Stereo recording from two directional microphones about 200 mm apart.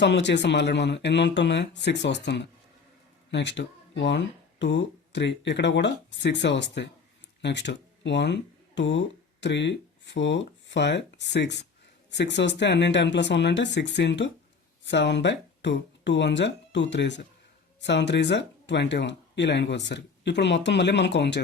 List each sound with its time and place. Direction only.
0.0 s speech: 60° left (ahead or behind)